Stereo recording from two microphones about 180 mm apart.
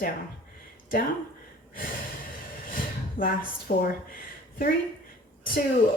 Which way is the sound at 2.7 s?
50° left (ahead or behind).